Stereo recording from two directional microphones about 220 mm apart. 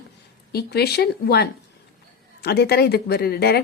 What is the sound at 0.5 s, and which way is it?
A woman's voice, 45° left (ahead or behind).